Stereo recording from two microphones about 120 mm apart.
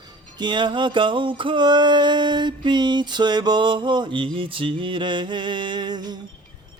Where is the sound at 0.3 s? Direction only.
40° right (ahead or behind).